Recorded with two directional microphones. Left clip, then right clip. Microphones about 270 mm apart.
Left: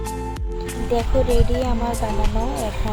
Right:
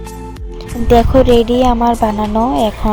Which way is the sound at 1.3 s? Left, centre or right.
Right.